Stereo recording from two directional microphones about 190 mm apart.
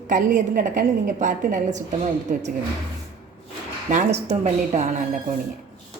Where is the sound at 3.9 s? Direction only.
35° right (ahead or behind).